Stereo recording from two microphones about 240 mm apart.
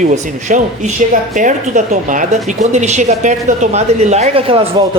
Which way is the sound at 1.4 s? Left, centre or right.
Right.